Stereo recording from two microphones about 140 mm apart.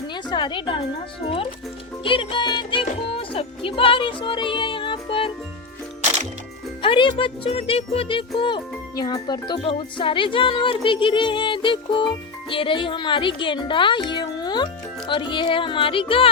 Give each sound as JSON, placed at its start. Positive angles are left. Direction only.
{"t": 0.1, "sound": "a woman's voice", "side_deg": 35}
{"t": 2.0, "sound": "speech", "side_deg": 35}
{"t": 6.8, "sound": "speech", "side_deg": 35}